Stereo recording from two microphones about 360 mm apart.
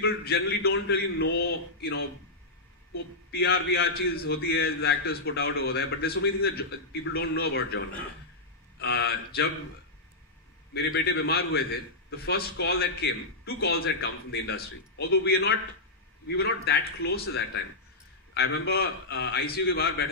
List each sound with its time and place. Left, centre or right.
0.0 s a man's voice: left
3.3 s a man's voice: left
10.7 s a man's voice: left